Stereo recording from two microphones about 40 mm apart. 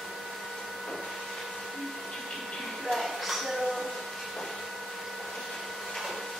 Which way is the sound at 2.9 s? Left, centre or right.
Centre.